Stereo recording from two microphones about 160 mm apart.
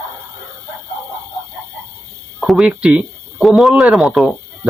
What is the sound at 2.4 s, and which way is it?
Speech, centre (ahead or behind).